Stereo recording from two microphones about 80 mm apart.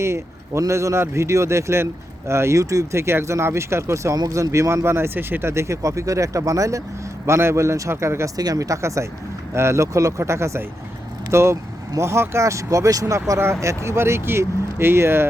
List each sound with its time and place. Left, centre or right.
0.0 s a man's voice: right
8.4 s speech: right